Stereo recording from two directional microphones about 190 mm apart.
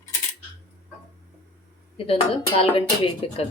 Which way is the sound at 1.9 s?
30° left (ahead or behind).